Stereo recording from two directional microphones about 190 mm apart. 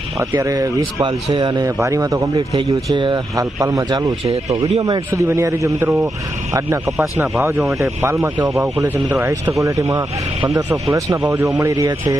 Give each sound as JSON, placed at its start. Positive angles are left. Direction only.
{"t": 0.2, "sound": "speech", "side_deg": -15}
{"t": 6.8, "sound": "speech", "side_deg": 0}
{"t": 7.7, "sound": "speech", "side_deg": -15}